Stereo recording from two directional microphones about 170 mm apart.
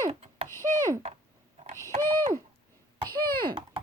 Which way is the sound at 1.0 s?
40° right (ahead or behind).